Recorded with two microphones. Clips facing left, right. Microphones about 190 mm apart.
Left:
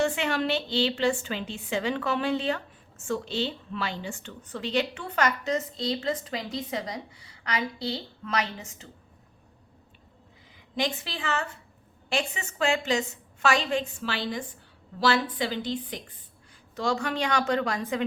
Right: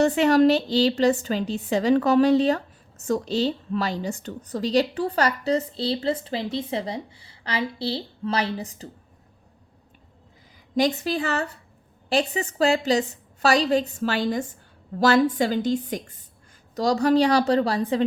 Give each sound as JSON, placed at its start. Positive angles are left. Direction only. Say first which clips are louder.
{"t": 0.0, "sound": "a woman's voice", "louder": "right 9 dB", "side_deg": -40}
{"t": 10.8, "sound": "a woman's voice", "louder": "right 8 dB", "side_deg": -40}